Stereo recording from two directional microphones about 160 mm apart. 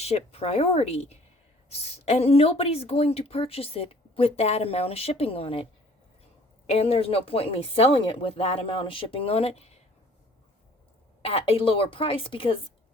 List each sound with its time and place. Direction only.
0.0 s speech: 40° left (ahead or behind)
6.7 s speech: 40° left (ahead or behind)
11.2 s speech: 35° left (ahead or behind)